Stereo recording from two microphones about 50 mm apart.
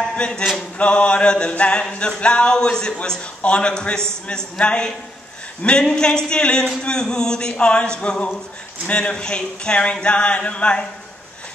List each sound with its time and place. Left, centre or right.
0.1 s a man's voice: left